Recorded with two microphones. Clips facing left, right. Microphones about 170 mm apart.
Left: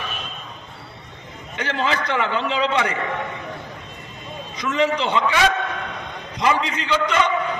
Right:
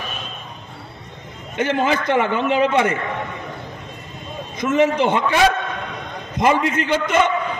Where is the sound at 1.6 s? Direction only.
55° right (ahead or behind).